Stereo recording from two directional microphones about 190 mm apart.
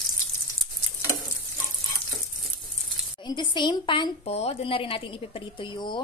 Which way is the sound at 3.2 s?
25° left (ahead or behind).